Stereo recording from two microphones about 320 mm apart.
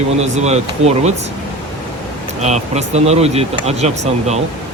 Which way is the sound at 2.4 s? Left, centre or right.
Right.